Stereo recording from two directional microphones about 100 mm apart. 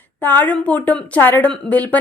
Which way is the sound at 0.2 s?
20° left (ahead or behind).